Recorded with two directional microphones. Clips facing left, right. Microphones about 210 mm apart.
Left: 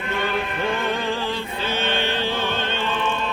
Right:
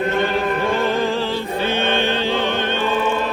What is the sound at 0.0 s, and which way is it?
Chant, 45° right (ahead or behind).